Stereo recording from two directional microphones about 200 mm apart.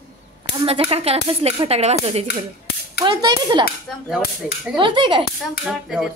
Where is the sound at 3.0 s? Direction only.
20° right (ahead or behind).